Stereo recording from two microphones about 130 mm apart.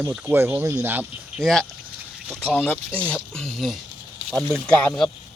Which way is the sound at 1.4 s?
Centre (ahead or behind).